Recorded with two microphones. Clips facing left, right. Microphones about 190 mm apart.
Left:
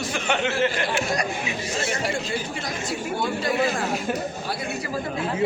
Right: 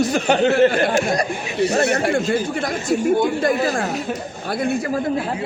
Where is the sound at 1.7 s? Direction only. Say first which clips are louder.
Right 8 dB; 65° right (ahead or behind).